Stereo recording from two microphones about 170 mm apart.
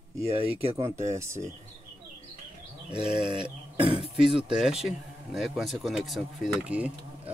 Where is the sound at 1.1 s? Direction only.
15° right (ahead or behind).